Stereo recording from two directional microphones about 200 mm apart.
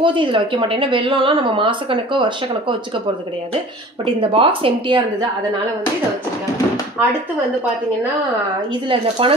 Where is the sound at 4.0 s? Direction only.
25° right (ahead or behind).